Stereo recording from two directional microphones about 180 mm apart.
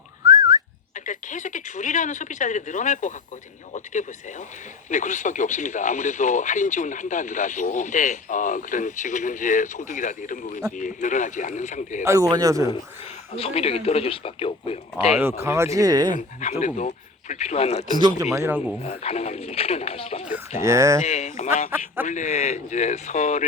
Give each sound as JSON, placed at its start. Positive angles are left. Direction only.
{"t": 0.3, "sound": "whistling", "side_deg": -20}
{"t": 0.9, "sound": "speech", "side_deg": 45}
{"t": 12.0, "sound": "speech", "side_deg": -15}
{"t": 13.3, "sound": "speech", "side_deg": 35}
{"t": 15.2, "sound": "speech", "side_deg": -15}
{"t": 16.1, "sound": "speech", "side_deg": 40}
{"t": 18.3, "sound": "speech", "side_deg": -10}
{"t": 18.8, "sound": "speech", "side_deg": 35}
{"t": 20.7, "sound": "speech", "side_deg": -20}
{"t": 21.0, "sound": "speech", "side_deg": 45}